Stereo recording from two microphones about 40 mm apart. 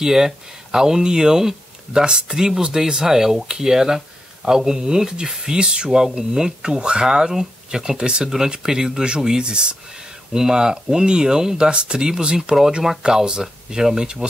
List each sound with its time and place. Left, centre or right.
0.0 s speech: centre